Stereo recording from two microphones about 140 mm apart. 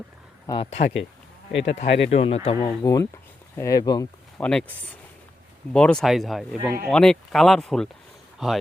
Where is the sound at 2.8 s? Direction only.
25° left (ahead or behind).